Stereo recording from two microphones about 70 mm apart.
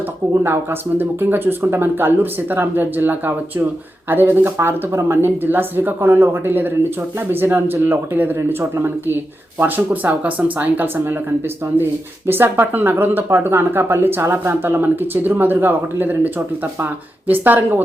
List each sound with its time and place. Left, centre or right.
0.4 s speech: right